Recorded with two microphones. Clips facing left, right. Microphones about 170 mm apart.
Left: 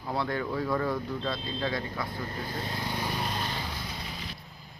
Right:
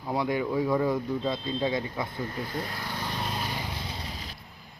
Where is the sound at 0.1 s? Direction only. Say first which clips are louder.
Right 3 dB; 15° right (ahead or behind).